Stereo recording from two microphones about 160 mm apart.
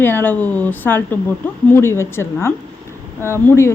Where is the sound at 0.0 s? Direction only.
15° left (ahead or behind).